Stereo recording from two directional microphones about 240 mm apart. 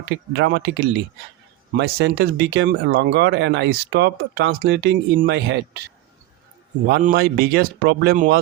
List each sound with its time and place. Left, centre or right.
0.3 s speech: right
6.8 s speech: right